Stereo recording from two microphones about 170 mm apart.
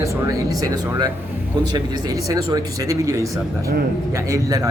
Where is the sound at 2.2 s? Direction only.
20° right (ahead or behind).